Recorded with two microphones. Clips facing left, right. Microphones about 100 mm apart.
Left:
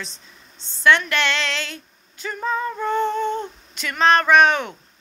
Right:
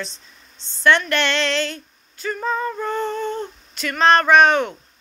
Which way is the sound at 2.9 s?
15° left (ahead or behind).